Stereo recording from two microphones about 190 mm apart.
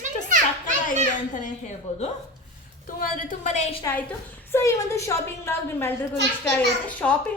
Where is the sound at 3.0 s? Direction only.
45° left (ahead or behind).